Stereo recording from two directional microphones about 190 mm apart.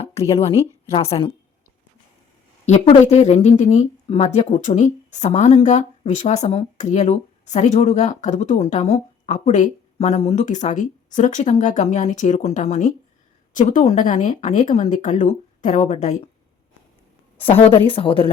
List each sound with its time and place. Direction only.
0.1 s a woman's voice: 30° left (ahead or behind)
2.6 s a woman's voice: 35° left (ahead or behind)
17.3 s a woman's voice: 10° left (ahead or behind)
17.8 s speech: 25° left (ahead or behind)